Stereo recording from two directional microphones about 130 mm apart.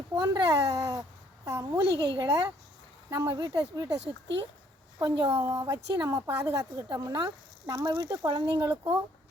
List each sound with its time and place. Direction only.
0.2 s a woman's voice: 30° right (ahead or behind)
4.9 s a woman's voice: 35° right (ahead or behind)
5.3 s a woman's voice: 25° right (ahead or behind)